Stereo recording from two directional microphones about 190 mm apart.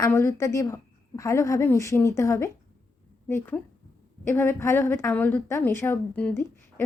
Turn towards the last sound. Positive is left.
turn(degrees=10)  # may be behind; listen again after turning